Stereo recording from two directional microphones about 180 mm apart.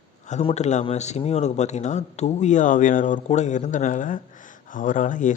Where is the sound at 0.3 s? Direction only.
40° left (ahead or behind).